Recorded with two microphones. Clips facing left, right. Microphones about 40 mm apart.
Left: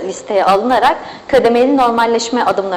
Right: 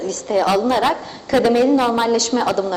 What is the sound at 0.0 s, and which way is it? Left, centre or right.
A woman's voice, left.